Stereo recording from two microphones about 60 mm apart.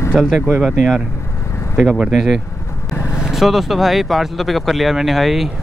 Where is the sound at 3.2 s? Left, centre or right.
Centre.